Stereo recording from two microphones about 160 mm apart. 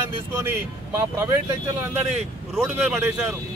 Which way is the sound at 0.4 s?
15° right (ahead or behind).